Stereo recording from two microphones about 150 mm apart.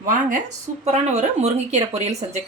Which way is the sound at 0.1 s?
55° right (ahead or behind).